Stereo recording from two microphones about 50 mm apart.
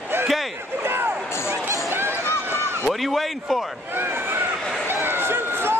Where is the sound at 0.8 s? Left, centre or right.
Right.